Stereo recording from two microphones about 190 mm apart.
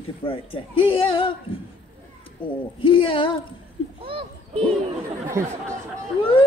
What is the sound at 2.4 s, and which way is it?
Speech, 25° left (ahead or behind).